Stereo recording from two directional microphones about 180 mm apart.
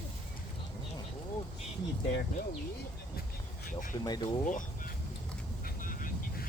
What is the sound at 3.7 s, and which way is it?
Speech, 50° left (ahead or behind).